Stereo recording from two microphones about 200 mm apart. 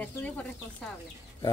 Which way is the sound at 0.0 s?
5° left (ahead or behind).